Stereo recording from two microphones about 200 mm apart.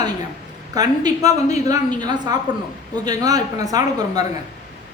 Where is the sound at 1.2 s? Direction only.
35° left (ahead or behind).